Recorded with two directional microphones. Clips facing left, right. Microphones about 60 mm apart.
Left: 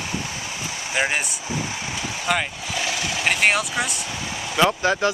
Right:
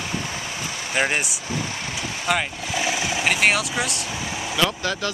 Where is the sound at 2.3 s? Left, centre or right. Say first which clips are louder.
Even; centre.